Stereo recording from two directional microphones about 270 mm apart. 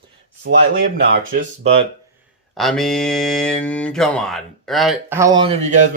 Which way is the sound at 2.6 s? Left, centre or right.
Centre.